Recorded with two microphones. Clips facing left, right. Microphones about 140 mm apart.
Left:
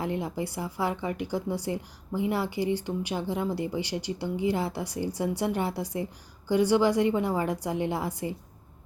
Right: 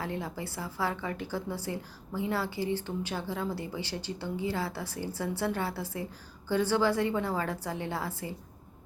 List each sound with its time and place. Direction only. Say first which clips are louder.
0.0 s a woman's voice: left 5 dB; 15° left (ahead or behind)